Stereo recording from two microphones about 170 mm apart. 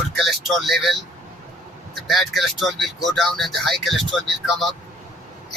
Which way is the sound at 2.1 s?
Centre (ahead or behind).